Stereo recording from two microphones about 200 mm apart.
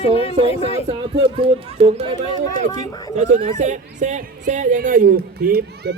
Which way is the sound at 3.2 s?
40° right (ahead or behind).